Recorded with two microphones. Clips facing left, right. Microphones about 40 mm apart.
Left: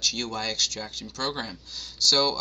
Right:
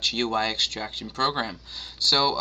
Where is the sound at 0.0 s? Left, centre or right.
Right.